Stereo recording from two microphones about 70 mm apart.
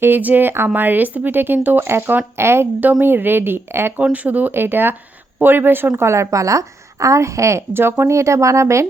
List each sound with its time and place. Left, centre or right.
0.0 s speech: right
4.0 s speech: centre
6.0 s a woman's voice: right